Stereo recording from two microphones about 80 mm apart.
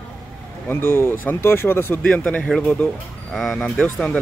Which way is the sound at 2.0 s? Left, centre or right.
Centre.